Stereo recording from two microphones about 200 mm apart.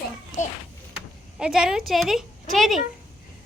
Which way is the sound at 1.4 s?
Centre (ahead or behind).